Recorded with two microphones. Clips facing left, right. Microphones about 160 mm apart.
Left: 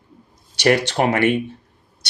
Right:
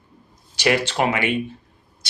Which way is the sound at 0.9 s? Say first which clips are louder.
Left 2 dB; 45° left (ahead or behind).